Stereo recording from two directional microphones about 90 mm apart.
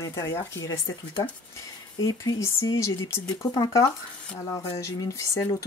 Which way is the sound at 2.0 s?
40° left (ahead or behind).